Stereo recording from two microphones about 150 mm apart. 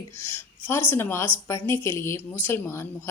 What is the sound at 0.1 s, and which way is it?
A woman's voice, 15° left (ahead or behind).